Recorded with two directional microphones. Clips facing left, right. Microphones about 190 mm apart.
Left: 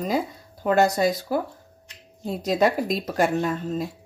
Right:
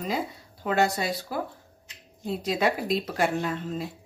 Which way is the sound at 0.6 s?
45° left (ahead or behind).